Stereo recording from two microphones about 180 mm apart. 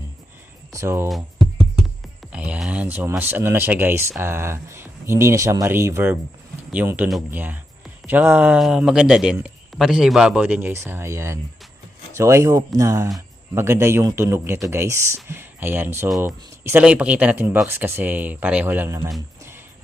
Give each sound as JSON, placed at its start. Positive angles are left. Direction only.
{"t": 0.7, "sound": "speech", "side_deg": -15}
{"t": 2.3, "sound": "speech", "side_deg": -5}